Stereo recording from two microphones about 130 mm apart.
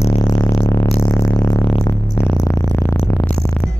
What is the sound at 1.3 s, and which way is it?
Music, 25° left (ahead or behind).